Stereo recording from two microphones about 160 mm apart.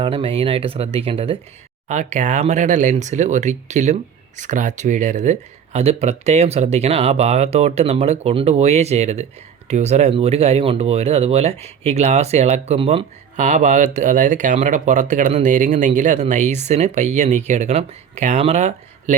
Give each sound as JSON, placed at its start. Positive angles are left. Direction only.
{"t": 0.0, "sound": "speech", "side_deg": -35}
{"t": 1.9, "sound": "speech", "side_deg": -45}
{"t": 13.3, "sound": "speech", "side_deg": -50}